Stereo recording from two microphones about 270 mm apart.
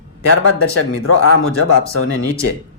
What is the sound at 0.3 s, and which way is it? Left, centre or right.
Speech, left.